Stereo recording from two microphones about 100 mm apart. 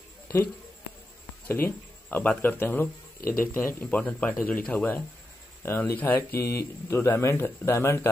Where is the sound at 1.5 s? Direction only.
20° left (ahead or behind).